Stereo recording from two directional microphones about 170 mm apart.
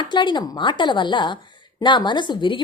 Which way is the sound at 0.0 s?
25° left (ahead or behind).